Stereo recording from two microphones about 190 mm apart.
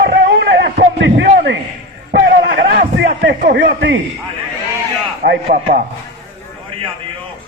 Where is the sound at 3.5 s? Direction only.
60° right (ahead or behind).